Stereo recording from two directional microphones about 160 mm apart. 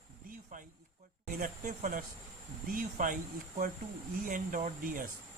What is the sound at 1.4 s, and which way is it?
Speech, 55° right (ahead or behind).